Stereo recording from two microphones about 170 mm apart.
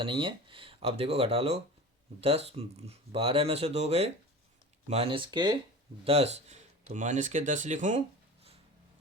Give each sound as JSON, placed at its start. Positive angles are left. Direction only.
{"t": 0.0, "sound": "speech", "side_deg": -30}
{"t": 6.1, "sound": "speech", "side_deg": -40}